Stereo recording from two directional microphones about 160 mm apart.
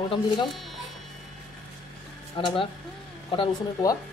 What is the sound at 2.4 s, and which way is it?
Speech, 30° left (ahead or behind).